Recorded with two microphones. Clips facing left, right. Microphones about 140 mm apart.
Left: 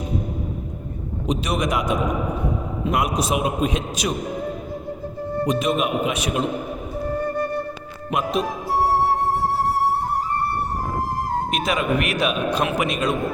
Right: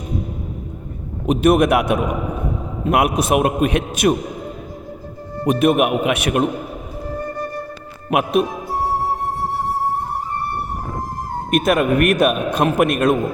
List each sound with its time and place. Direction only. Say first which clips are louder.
1.3 s a man's voice: right 9 dB; 55° right (ahead or behind)
5.5 s a man's voice: right 8 dB; 60° right (ahead or behind)
8.1 s a man's voice: right 6 dB; 60° right (ahead or behind)
9.0 s music: left 2 dB; 90° left
11.5 s speech: right 9 dB; 55° right (ahead or behind)